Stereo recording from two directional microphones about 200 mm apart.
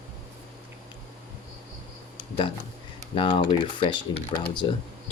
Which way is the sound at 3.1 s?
25° left (ahead or behind).